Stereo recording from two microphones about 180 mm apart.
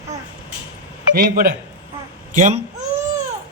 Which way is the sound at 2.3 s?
45° right (ahead or behind).